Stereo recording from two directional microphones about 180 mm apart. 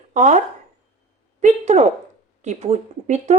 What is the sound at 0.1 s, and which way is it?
Speech, 40° right (ahead or behind).